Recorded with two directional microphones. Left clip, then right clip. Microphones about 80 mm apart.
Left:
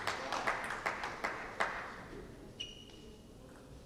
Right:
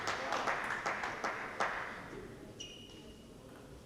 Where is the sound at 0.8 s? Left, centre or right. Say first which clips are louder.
Right 1 dB; left.